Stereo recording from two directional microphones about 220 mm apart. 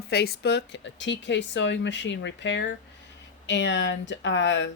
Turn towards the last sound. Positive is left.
turn(degrees=55)  # may be behind; listen again after turning